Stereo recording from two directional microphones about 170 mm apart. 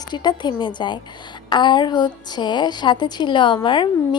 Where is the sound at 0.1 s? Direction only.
25° left (ahead or behind).